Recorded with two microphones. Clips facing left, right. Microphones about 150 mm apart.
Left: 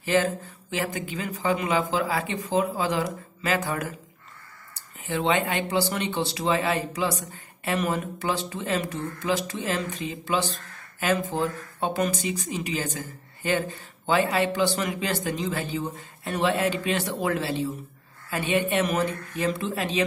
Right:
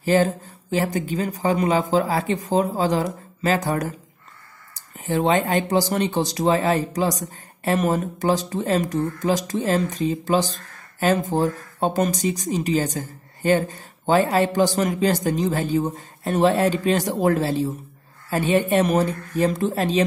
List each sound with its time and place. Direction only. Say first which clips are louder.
0.0 s speech: right 5 dB; 40° right (ahead or behind)
4.9 s speech: right 5 dB; 40° right (ahead or behind)